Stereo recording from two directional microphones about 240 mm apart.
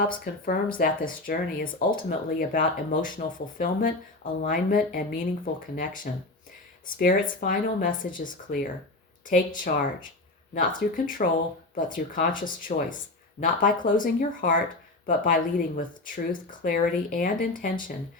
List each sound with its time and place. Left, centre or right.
0.0 s speech: left